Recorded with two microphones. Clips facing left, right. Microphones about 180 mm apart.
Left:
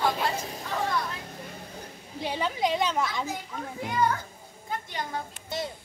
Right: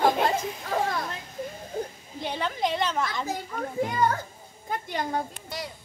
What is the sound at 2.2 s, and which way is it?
Speech, 5° left (ahead or behind).